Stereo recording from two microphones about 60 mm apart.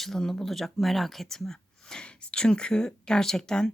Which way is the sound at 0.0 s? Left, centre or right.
Centre.